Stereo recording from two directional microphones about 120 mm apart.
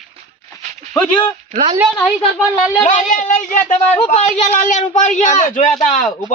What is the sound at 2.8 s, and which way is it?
Speech, 90° left.